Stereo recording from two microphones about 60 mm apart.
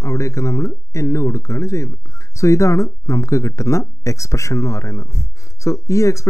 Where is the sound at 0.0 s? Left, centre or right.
Left.